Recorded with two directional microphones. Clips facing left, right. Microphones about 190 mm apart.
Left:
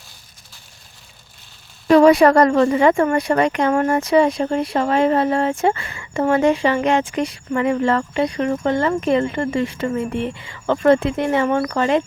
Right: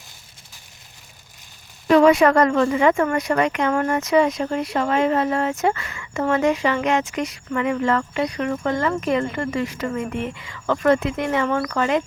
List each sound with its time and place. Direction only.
1.9 s a woman's voice: 35° left (ahead or behind)